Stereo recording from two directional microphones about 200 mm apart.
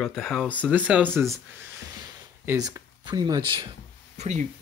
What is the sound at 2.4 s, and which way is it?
Speech, 20° right (ahead or behind).